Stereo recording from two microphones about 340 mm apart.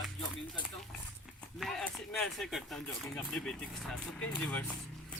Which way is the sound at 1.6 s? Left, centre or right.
Centre.